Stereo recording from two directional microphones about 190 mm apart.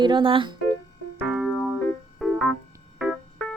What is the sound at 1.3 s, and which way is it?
Keyboard, 5° right (ahead or behind).